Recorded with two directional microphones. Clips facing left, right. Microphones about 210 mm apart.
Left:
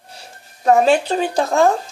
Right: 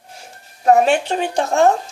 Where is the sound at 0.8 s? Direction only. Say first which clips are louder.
Left 2 dB; 35° left (ahead or behind).